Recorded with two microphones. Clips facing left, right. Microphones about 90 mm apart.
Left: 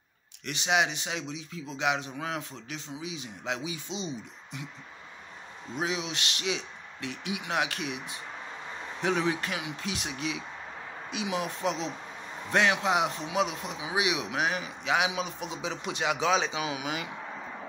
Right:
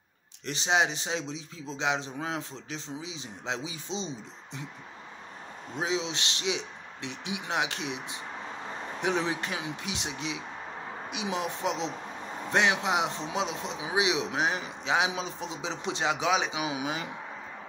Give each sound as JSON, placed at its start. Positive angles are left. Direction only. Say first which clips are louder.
{"t": 0.5, "sound": "a man's voice", "louder": "right 1 dB", "side_deg": -30}
{"t": 5.8, "sound": "a man's voice", "louder": "right 1 dB", "side_deg": -25}
{"t": 16.3, "sound": "speech", "louder": "left 2 dB", "side_deg": -15}
{"t": 16.7, "sound": "a man's voice", "louder": "right 1 dB", "side_deg": -25}